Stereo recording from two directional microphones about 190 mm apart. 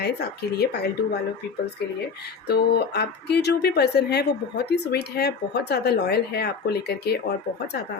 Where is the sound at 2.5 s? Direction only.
60° left (ahead or behind).